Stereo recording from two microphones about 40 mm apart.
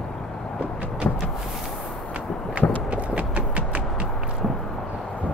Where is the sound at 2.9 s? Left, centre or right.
Right.